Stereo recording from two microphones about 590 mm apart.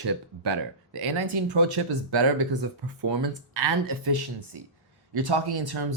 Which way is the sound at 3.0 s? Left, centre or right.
Right.